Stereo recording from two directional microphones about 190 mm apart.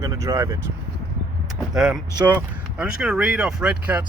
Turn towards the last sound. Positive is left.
turn(degrees=-5)  # may be behind; listen again after turning